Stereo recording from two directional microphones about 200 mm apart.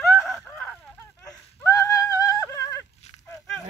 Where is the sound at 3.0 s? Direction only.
35° left (ahead or behind).